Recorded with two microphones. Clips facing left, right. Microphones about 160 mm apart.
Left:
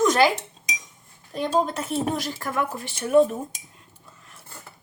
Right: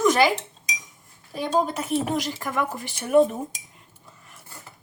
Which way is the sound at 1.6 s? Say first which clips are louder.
Even; 10° right (ahead or behind).